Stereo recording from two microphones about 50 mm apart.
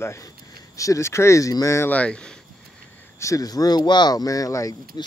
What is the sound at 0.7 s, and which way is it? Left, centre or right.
Speech, left.